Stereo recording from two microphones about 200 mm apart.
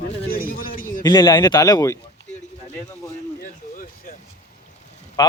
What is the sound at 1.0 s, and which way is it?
Speech, 20° left (ahead or behind).